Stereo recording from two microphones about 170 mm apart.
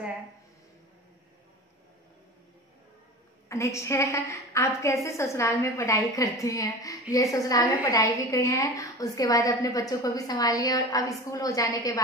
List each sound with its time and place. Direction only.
3.4 s a woman's voice: 15° left (ahead or behind)